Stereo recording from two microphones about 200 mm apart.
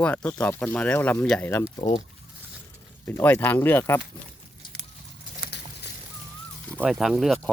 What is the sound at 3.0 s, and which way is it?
Speech, 10° left (ahead or behind).